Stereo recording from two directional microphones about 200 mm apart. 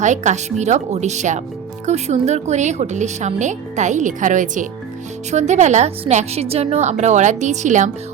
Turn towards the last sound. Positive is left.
turn(degrees=-40)  # may be behind; listen again after turning